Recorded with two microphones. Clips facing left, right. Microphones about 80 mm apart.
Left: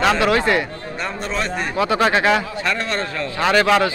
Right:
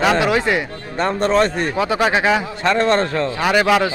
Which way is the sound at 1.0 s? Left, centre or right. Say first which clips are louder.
Right 9 dB; right.